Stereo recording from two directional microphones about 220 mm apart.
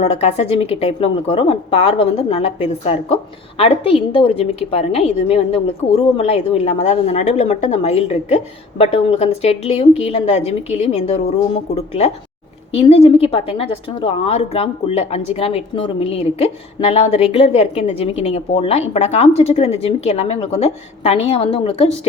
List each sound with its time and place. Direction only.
0.0 s a woman's voice: 30° left (ahead or behind)